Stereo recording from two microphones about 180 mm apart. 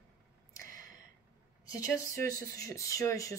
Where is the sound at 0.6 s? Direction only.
50° right (ahead or behind).